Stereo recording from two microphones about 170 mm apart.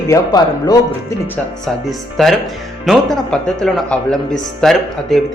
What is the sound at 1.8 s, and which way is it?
Speech, centre (ahead or behind).